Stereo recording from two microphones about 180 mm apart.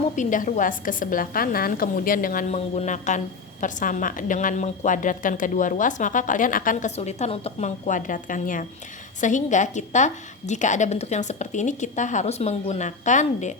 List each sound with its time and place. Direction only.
0.2 s a woman's voice: 45° left (ahead or behind)